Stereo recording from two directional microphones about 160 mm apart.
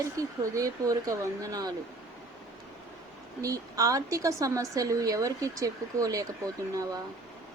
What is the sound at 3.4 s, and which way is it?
A woman's voice, 20° right (ahead or behind).